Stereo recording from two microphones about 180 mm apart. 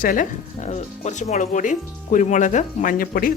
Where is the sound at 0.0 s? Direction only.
50° left (ahead or behind).